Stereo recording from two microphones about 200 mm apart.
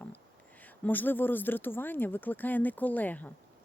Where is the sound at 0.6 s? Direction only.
10° left (ahead or behind).